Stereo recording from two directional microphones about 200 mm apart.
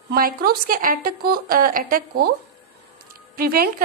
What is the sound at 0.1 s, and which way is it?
A woman's voice, 50° right (ahead or behind).